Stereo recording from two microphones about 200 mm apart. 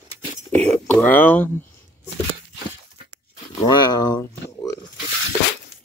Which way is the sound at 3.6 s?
20° left (ahead or behind).